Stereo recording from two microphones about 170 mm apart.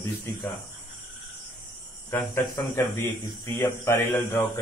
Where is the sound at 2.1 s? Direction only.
15° left (ahead or behind).